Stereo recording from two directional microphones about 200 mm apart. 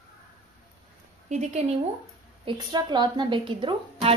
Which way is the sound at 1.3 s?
35° right (ahead or behind).